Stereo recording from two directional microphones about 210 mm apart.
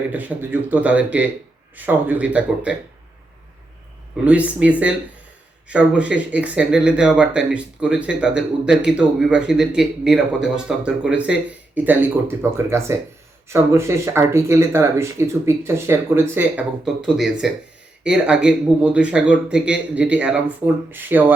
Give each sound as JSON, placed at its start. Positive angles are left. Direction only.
{"t": 0.1, "sound": "speech", "side_deg": -5}
{"t": 4.2, "sound": "speech", "side_deg": -5}